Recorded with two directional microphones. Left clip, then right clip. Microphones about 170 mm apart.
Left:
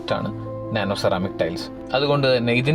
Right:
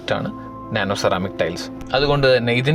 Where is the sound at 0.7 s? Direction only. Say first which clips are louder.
Right 2 dB; 20° right (ahead or behind).